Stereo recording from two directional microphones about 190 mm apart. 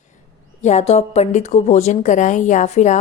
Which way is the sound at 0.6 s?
35° left (ahead or behind).